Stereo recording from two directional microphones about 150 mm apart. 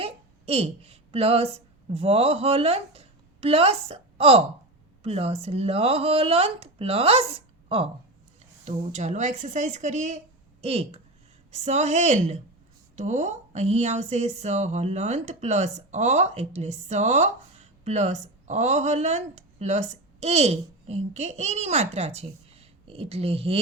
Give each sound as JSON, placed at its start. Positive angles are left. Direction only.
{"t": 0.0, "sound": "speech", "side_deg": -40}
{"t": 8.6, "sound": "speech", "side_deg": -50}